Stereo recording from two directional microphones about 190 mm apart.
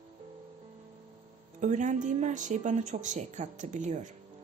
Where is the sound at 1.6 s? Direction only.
40° right (ahead or behind).